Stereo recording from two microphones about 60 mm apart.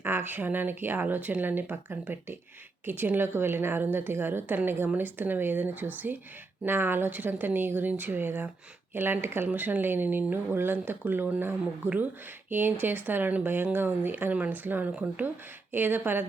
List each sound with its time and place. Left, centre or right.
0.0 s speech: right
9.5 s speech: right